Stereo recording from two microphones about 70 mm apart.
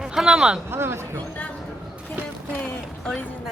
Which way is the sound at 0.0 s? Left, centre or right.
Centre.